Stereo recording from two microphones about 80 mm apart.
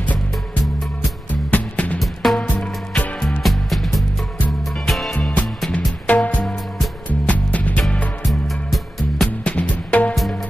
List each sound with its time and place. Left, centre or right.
1.3 s music: centre
2.0 s music: centre
2.4 s music: centre
3.2 s music: centre
5.7 s music: centre
8.3 s music: centre
9.4 s music: centre